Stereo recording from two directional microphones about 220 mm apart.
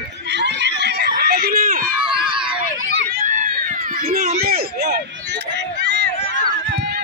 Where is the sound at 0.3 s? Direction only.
50° right (ahead or behind).